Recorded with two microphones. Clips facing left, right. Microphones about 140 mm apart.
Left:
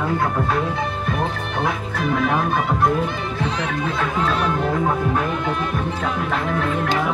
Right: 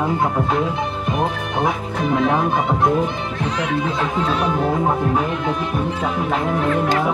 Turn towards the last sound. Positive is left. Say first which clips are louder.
# right 2 dB
turn(degrees=-15)  # may be behind; listen again after turning